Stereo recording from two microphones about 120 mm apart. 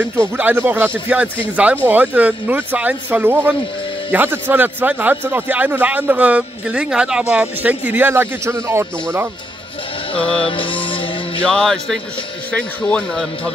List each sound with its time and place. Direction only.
0.0 s a man's voice: 15° right (ahead or behind)
10.1 s speech: 10° left (ahead or behind)
10.4 s music: 45° left (ahead or behind)
11.4 s speech: 5° left (ahead or behind)